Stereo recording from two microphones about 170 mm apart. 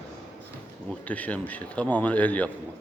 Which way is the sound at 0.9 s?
10° left (ahead or behind).